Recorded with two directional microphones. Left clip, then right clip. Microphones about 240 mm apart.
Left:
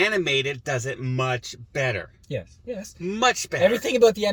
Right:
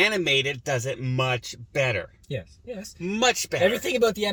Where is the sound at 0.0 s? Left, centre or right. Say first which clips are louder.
Even; centre.